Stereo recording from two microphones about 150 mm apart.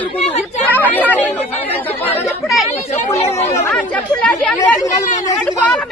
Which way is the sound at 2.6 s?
50° left (ahead or behind).